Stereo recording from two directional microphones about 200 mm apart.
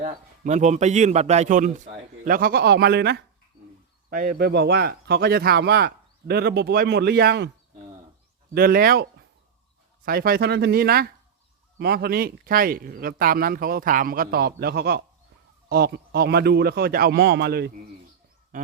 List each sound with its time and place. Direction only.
0.0 s a man's voice: 35° right (ahead or behind); by 7.5 s 55° right (ahead or behind)
8.5 s a man's voice: 50° right (ahead or behind)
10.1 s a man's voice: 50° right (ahead or behind)
18.5 s a sound: 40° right (ahead or behind)